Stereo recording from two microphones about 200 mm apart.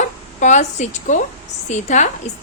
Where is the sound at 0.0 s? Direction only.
35° left (ahead or behind).